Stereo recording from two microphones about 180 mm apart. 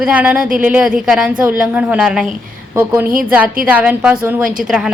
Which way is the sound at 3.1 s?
50° right (ahead or behind).